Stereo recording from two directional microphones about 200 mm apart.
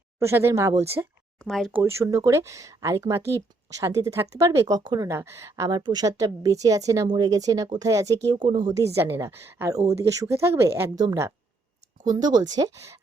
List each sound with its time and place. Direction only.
0.2 s speech: 10° right (ahead or behind)
1.4 s speech: centre (ahead or behind)
1.8 s speech: 15° right (ahead or behind)